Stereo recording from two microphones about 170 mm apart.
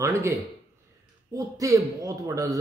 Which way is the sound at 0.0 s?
15° right (ahead or behind).